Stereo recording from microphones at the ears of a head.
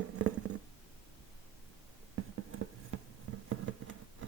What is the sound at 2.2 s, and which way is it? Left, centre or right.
Insect, right.